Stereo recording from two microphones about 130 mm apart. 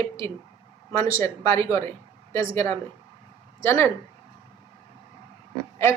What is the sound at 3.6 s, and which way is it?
Speech, 20° left (ahead or behind).